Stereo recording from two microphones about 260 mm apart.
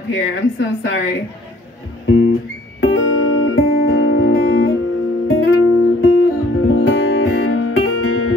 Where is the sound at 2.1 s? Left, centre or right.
Left.